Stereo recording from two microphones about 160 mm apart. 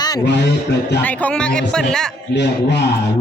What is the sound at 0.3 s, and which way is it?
Mantra, 90° left.